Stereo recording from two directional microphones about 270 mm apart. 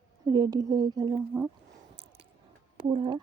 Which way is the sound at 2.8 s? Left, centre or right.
Centre.